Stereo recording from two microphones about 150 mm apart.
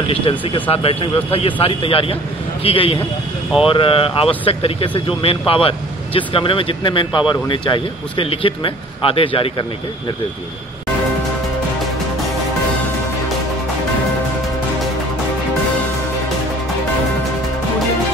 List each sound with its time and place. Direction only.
0.0 s speech: 40° left (ahead or behind)